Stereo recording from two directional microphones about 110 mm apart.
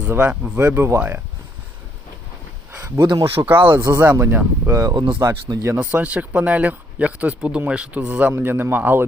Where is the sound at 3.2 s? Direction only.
20° right (ahead or behind).